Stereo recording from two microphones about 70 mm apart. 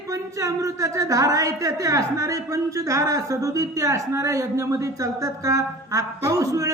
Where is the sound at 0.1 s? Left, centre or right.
Right.